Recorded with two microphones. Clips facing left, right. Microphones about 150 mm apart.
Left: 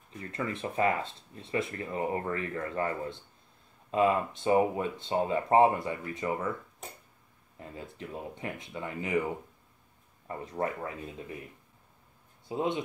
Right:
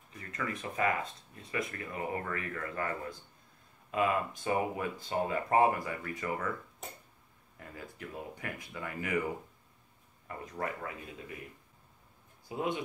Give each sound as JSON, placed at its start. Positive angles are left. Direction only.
{"t": 0.2, "sound": "speech", "side_deg": 30}
{"t": 7.5, "sound": "speech", "side_deg": 25}
{"t": 10.2, "sound": "speech", "side_deg": 30}
{"t": 12.4, "sound": "speech", "side_deg": 25}